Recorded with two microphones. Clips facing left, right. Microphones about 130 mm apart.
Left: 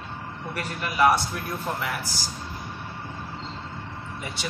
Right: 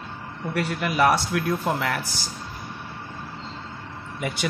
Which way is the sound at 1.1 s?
90° right.